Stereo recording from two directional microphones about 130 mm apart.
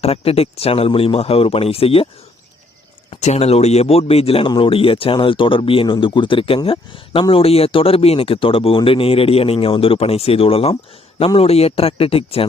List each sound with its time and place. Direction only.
0.0 s speech: 50° left (ahead or behind)
3.1 s speech: 55° left (ahead or behind)